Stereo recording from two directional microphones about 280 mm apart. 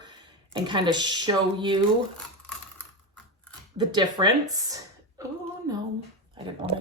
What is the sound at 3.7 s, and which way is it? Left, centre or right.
A woman's voice, centre.